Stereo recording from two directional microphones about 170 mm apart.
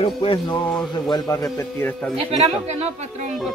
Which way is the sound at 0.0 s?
30° left (ahead or behind).